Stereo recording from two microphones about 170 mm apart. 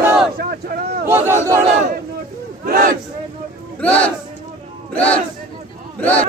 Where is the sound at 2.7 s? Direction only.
55° right (ahead or behind).